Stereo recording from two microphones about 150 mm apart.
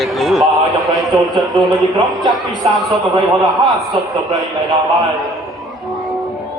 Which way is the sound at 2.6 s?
40° right (ahead or behind).